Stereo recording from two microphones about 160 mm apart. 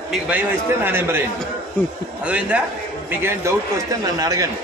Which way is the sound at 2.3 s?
5° right (ahead or behind).